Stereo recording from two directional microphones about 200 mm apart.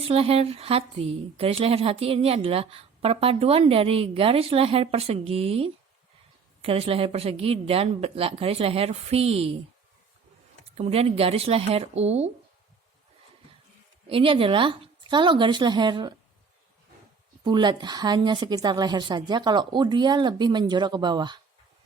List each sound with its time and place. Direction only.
0.1 s a woman's voice: 30° right (ahead or behind)
10.8 s a woman's voice: 30° right (ahead or behind)
14.1 s a woman's voice: 25° right (ahead or behind)
17.4 s a woman's voice: 25° right (ahead or behind)